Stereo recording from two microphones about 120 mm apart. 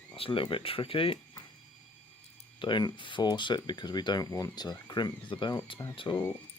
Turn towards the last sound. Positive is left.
turn(degrees=40)  # may be behind; listen again after turning